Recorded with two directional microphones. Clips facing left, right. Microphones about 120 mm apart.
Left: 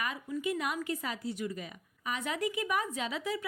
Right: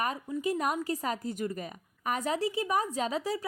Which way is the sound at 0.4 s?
40° right (ahead or behind).